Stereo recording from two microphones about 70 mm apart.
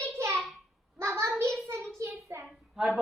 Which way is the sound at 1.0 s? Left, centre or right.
Right.